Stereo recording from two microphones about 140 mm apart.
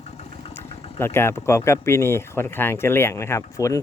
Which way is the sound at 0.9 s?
15° left (ahead or behind).